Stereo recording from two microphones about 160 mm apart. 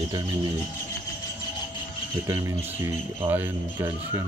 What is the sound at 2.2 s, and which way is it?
Speech, 20° right (ahead or behind).